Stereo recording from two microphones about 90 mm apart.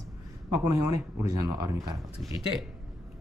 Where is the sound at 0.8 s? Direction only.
45° right (ahead or behind).